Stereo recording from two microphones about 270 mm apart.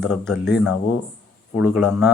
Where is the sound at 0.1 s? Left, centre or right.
Centre.